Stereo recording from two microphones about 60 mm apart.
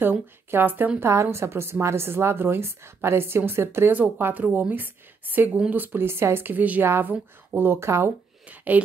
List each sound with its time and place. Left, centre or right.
0.0 s speech: right
1.0 s a woman's voice: right
4.2 s speech: right
6.5 s speech: right
6.8 s speech: right
8.5 s speech: right